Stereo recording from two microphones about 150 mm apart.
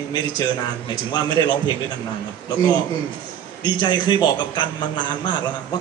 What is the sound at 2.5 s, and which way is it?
A man's voice, 25° left (ahead or behind).